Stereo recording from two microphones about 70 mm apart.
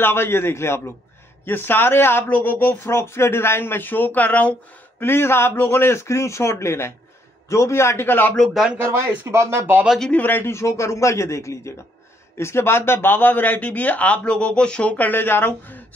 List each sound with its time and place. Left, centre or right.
0.0 s speech: left
5.0 s speech: left
8.7 s speech: right
9.2 s speech: right
10.1 s speech: left
10.5 s speech: left